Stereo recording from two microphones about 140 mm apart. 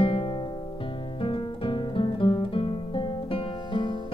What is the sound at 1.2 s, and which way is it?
Guitar, 40° left (ahead or behind).